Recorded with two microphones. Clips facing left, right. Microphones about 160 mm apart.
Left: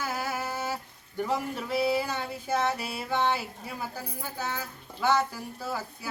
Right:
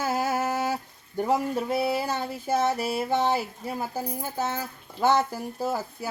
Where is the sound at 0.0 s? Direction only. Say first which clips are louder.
Right 6 dB; 45° right (ahead or behind).